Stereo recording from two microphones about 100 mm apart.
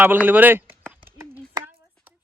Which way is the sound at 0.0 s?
20° right (ahead or behind).